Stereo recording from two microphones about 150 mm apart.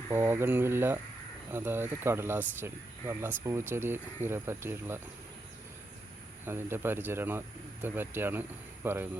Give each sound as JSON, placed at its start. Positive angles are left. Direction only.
{"t": 0.1, "sound": "speech", "side_deg": -15}
{"t": 6.4, "sound": "speech", "side_deg": -15}